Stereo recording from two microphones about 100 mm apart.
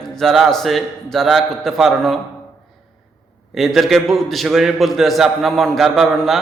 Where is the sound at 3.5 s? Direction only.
Centre (ahead or behind).